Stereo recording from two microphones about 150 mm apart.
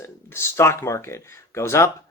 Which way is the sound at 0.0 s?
15° left (ahead or behind).